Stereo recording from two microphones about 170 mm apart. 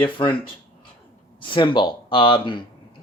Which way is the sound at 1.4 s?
30° left (ahead or behind).